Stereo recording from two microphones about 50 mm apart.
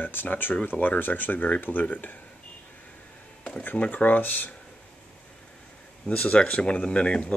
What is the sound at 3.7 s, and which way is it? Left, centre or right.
Speech, left.